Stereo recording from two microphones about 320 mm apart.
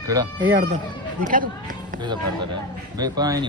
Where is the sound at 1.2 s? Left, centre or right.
Right.